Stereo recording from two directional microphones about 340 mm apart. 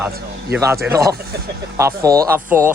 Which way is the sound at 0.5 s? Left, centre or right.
Centre.